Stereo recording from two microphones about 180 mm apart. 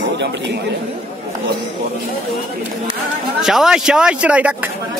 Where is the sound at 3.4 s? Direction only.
5° right (ahead or behind).